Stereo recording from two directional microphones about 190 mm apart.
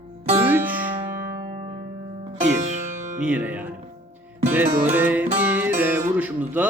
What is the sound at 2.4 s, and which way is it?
Music, 40° right (ahead or behind).